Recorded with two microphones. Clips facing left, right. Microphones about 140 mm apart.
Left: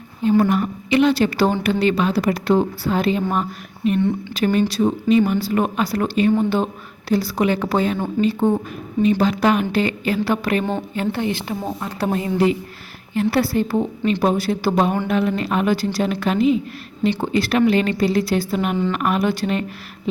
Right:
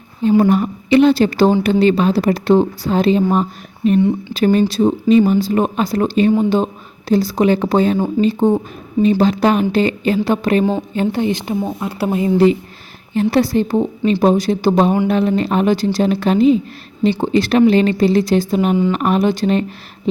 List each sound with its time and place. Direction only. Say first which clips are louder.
0.2 s a woman's voice: right 4 dB; 30° right (ahead or behind)
11.8 s speech: right 3 dB; 5° right (ahead or behind)
12.2 s speech: right 8 dB; 25° right (ahead or behind)